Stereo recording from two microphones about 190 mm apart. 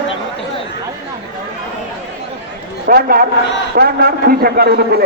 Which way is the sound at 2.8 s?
50° right (ahead or behind).